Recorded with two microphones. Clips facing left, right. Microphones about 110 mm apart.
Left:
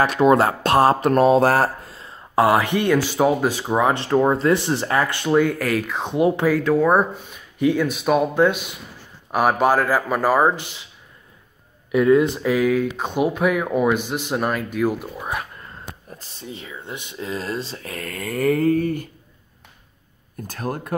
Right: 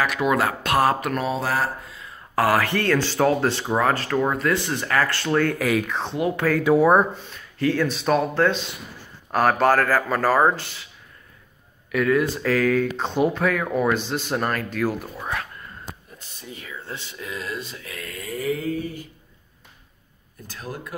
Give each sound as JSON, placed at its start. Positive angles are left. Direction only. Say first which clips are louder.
{"t": 0.0, "sound": "speech", "louder": "left 6 dB", "side_deg": 30}
{"t": 1.2, "sound": "speech", "louder": "left 11 dB", "side_deg": 50}
{"t": 2.0, "sound": "speech", "louder": "left 5 dB", "side_deg": 25}
{"t": 5.6, "sound": "speech", "louder": "even", "side_deg": 0}
{"t": 6.1, "sound": "speech", "louder": "left 7 dB", "side_deg": 25}
{"t": 6.6, "sound": "speech", "louder": "right 5 dB", "side_deg": -15}
{"t": 6.9, "sound": "speech", "louder": "even", "side_deg": 10}
{"t": 11.9, "sound": "speech", "louder": "left 5 dB", "side_deg": 25}
{"t": 16.2, "sound": "speech", "louder": "left 4 dB", "side_deg": 30}
{"t": 17.3, "sound": "speech", "louder": "left 4 dB", "side_deg": 30}
{"t": 20.4, "sound": "speech", "louder": "left 6 dB", "side_deg": 50}